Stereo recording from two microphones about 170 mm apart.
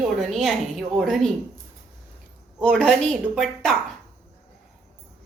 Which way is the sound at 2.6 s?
5° left (ahead or behind).